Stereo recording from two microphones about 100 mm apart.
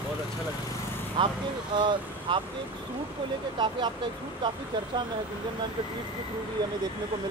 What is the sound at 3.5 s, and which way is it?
Speech, 50° right (ahead or behind).